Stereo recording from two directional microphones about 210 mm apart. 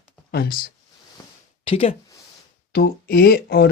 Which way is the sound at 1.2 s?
15° left (ahead or behind).